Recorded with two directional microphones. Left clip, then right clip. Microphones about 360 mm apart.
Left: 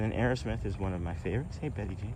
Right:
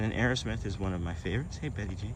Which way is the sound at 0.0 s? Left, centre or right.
Centre.